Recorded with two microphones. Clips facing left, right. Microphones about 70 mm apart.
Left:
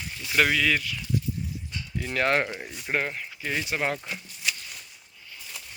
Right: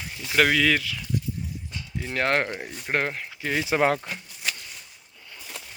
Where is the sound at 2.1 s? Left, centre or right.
Right.